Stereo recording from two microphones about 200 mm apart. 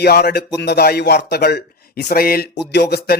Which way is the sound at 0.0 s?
50° left (ahead or behind).